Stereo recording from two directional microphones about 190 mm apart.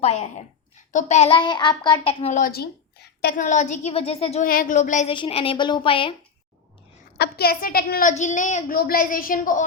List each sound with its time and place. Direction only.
0.0 s a woman's voice: 35° left (ahead or behind)
2.4 s a woman's voice: 55° left (ahead or behind)
3.4 s speech: 40° left (ahead or behind)
4.4 s speech: 45° left (ahead or behind)
5.1 s a child's voice: 25° left (ahead or behind)
7.2 s a woman's voice: 55° left (ahead or behind)